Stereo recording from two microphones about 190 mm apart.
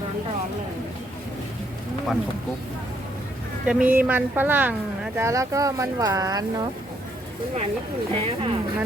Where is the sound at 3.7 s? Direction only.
5° right (ahead or behind).